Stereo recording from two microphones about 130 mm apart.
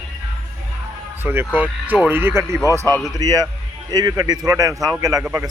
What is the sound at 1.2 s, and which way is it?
Speech, 15° right (ahead or behind).